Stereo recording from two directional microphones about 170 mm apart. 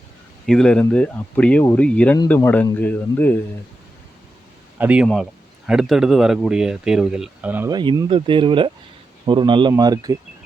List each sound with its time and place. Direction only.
0.4 s speech: 5° left (ahead or behind)
4.8 s speech: 10° right (ahead or behind)
7.7 s speech: 25° right (ahead or behind)